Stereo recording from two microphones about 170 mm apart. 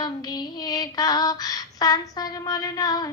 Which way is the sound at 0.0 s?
25° left (ahead or behind).